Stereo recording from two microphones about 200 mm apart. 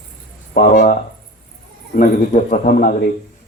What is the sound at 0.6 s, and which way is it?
Speech, 45° left (ahead or behind).